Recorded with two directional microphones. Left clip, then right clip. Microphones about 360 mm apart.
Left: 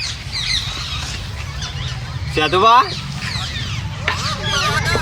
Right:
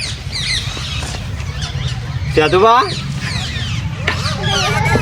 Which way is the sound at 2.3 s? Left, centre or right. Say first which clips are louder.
Right 2 dB; centre.